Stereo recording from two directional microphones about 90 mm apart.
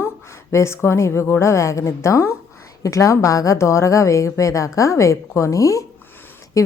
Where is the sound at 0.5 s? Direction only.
30° left (ahead or behind).